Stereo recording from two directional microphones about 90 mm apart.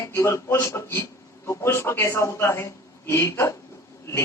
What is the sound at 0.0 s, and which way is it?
A man's voice, 30° left (ahead or behind).